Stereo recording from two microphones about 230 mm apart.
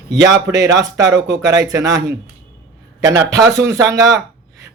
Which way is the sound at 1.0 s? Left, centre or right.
Right.